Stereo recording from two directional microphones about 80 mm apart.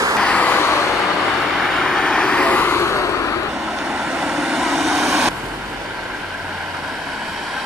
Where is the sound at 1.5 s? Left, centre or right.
Centre.